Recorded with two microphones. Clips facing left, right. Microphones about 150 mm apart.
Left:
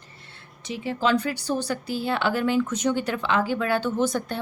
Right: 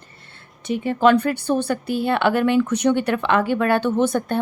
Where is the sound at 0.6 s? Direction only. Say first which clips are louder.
Right 7 dB; 55° right (ahead or behind).